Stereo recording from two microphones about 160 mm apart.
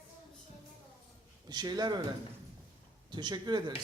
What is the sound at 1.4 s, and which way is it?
Speech, 25° right (ahead or behind).